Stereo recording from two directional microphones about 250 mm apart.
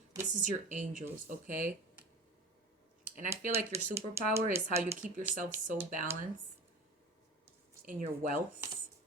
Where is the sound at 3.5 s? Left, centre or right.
Centre.